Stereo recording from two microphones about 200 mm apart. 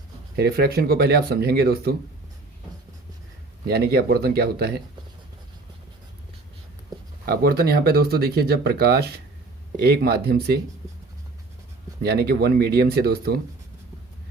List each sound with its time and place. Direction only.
0.3 s speech: 50° right (ahead or behind)
3.7 s speech: 50° right (ahead or behind)
7.3 s speech: 50° right (ahead or behind)
12.0 s speech: 50° right (ahead or behind)